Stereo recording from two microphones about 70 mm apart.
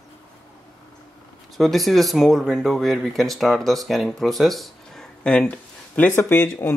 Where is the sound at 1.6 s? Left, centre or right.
Centre.